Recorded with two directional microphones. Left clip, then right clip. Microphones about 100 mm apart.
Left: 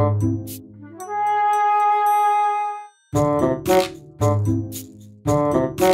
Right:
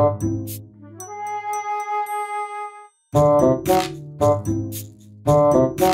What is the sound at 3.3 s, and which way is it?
Music, 40° left (ahead or behind).